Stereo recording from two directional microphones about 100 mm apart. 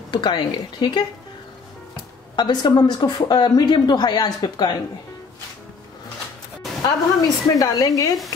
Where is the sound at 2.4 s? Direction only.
45° left (ahead or behind).